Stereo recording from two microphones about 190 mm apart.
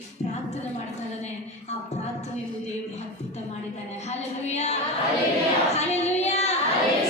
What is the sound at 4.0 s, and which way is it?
Child singing, 35° left (ahead or behind).